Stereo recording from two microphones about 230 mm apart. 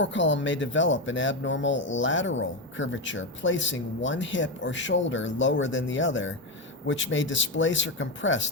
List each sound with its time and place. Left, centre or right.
0.0 s speech: left